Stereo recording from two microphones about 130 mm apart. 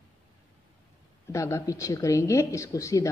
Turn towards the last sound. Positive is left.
turn(degrees=25)  # may be behind; listen again after turning